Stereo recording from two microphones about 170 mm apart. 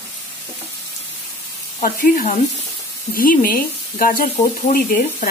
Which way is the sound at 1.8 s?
55° left (ahead or behind).